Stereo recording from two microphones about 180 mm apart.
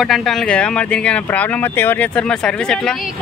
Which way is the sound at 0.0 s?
Centre (ahead or behind).